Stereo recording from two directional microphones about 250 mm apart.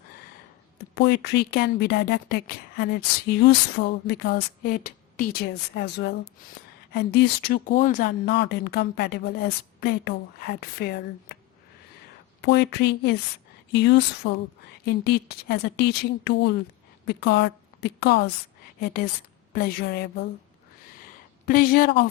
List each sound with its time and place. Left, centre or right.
0.9 s a woman's voice: left
12.4 s a woman's voice: left
19.5 s a woman's voice: left
21.4 s a woman's voice: left